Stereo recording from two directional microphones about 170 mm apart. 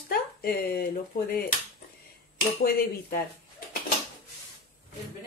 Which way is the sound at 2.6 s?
65° left (ahead or behind).